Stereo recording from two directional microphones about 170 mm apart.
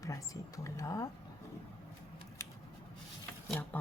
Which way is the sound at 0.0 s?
20° left (ahead or behind).